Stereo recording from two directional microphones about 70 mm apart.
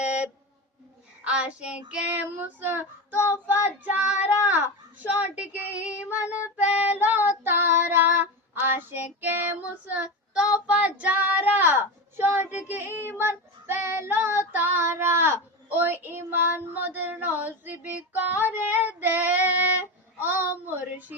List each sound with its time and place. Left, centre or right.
0.0 s a sound: centre
1.2 s a child's voice: centre
1.9 s female singing: centre
13.1 s child singing: right
16.8 s female singing: right